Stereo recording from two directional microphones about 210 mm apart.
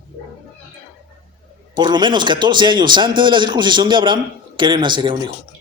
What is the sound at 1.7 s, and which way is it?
A man's voice, 20° right (ahead or behind).